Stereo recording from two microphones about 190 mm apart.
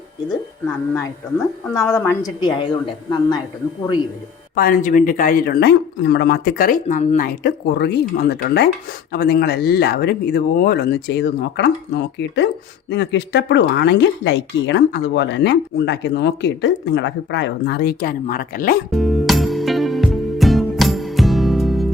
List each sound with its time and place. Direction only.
1.7 s a woman's voice: 15° left (ahead or behind)
2.4 s speech: 25° left (ahead or behind)
4.5 s a man's voice: 50° left (ahead or behind)
6.8 s speech: 35° left (ahead or behind)
7.2 s speech: 60° left (ahead or behind)
18.9 s music: centre (ahead or behind)